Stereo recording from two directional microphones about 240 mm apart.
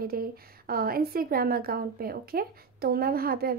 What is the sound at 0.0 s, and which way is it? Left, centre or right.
A woman's voice, right.